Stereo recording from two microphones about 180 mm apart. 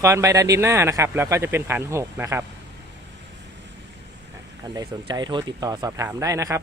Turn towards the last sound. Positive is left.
turn(degrees=-15)  # may be behind; listen again after turning